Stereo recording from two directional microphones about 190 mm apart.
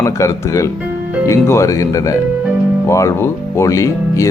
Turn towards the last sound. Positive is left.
turn(degrees=15)  # may be behind; listen again after turning